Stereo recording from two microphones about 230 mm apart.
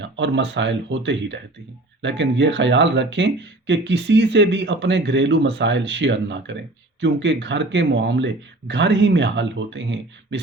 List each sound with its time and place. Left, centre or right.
0.0 s speech: right